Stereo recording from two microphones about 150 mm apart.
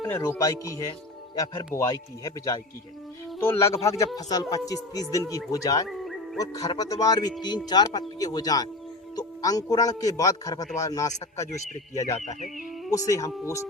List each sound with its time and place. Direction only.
0.1 s a man's voice: 20° left (ahead or behind)
6.0 s music: centre (ahead or behind)
6.4 s a man's voice: 25° left (ahead or behind)
12.2 s a sound: 50° left (ahead or behind)
12.9 s a man's voice: 20° left (ahead or behind)